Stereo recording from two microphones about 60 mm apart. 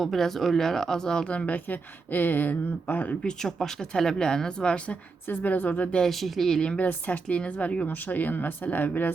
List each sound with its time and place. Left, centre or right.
0.0 s speech: centre
1.5 s speech: left
3.2 s speech: centre
5.3 s speech: left
6.0 s speech: centre
6.7 s speech: left